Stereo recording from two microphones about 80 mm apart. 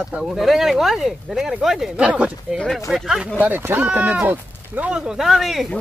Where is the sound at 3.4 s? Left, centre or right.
Right.